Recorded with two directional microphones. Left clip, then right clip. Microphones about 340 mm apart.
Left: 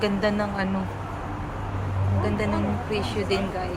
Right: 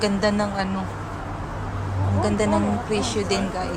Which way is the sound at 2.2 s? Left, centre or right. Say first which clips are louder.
Right 5 dB; centre.